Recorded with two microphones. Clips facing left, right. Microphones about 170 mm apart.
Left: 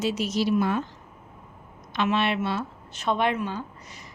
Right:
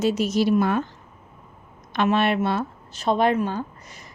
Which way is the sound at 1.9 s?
50° right (ahead or behind).